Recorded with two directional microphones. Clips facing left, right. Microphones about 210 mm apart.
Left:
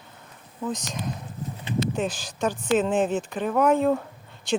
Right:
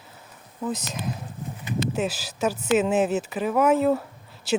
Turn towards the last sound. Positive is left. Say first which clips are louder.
# right 1 dB
turn(degrees=-5)  # may be behind; listen again after turning